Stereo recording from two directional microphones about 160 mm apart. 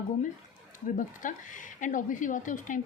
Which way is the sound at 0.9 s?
55° left (ahead or behind).